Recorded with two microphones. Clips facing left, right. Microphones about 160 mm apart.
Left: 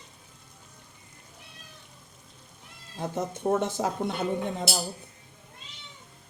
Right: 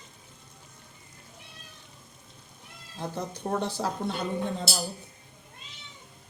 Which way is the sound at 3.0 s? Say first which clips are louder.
Left 4 dB; 20° left (ahead or behind).